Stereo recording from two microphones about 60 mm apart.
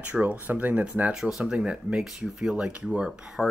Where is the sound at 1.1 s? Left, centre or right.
Centre.